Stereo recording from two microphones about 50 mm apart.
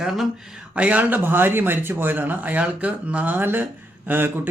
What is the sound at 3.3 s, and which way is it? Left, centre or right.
Speech, right.